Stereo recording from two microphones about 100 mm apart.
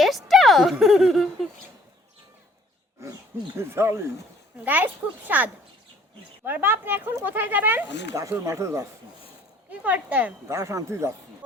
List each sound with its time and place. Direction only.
0.0 s a sound: centre (ahead or behind)
3.6 s a child's voice: 25° right (ahead or behind)
8.1 s speech: 30° right (ahead or behind)
9.8 s a child's voice: 15° right (ahead or behind)
10.5 s speech: 30° right (ahead or behind)